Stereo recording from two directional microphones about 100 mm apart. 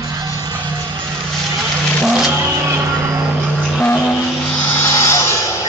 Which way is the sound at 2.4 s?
30° right (ahead or behind).